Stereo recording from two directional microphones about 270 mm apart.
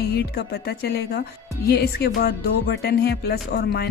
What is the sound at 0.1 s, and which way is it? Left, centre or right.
Music, left.